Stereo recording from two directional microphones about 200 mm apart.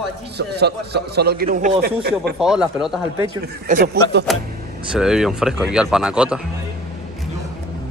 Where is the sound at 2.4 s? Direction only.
5° right (ahead or behind).